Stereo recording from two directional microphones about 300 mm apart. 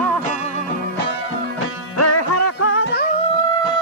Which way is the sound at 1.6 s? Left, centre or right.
Left.